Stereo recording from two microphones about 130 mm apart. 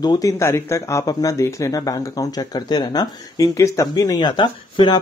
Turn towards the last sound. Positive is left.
turn(degrees=35)  # may be behind; listen again after turning